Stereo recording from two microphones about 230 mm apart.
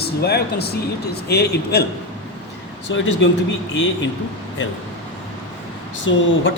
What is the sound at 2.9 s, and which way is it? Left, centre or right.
Speech, left.